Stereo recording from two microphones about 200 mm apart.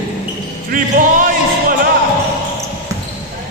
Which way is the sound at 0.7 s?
40° right (ahead or behind).